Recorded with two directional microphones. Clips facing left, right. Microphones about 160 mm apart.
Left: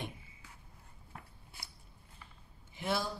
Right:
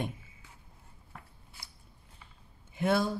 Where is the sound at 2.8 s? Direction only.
50° right (ahead or behind).